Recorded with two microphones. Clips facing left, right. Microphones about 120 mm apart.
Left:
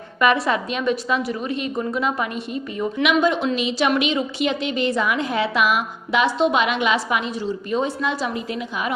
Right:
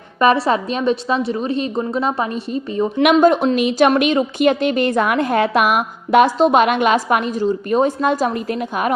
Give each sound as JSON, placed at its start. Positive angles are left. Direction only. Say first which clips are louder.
{"t": 0.2, "sound": "a woman's voice", "louder": "right 4 dB", "side_deg": -30}
{"t": 3.0, "sound": "a woman's voice", "louder": "right 7 dB", "side_deg": -50}